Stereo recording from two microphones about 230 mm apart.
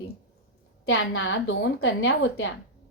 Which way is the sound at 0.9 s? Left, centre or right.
Left.